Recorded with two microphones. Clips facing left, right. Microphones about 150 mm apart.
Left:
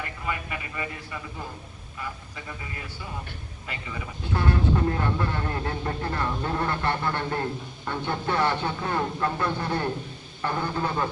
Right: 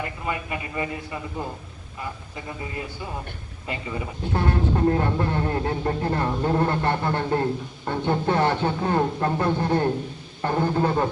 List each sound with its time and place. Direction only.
0.3 s a man's voice: 25° right (ahead or behind)
3.7 s speech: 30° right (ahead or behind)
7.9 s speech: 40° right (ahead or behind)